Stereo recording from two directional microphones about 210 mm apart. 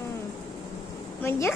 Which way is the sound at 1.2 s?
15° left (ahead or behind).